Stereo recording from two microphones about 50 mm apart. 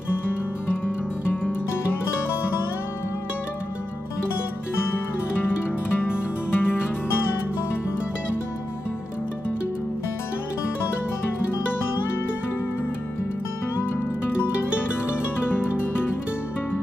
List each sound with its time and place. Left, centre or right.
0.8 s music: left
5.9 s music: left